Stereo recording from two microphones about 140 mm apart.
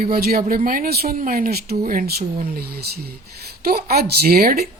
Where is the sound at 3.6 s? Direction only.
90° right.